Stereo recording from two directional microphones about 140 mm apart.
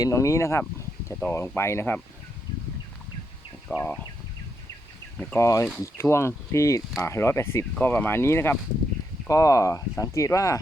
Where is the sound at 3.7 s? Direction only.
15° left (ahead or behind).